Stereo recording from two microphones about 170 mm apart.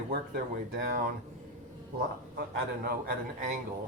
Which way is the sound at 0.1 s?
60° right (ahead or behind).